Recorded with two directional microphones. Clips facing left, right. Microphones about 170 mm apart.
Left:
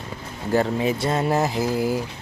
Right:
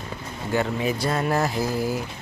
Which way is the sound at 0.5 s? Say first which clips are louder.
Left 3 dB; 30° left (ahead or behind).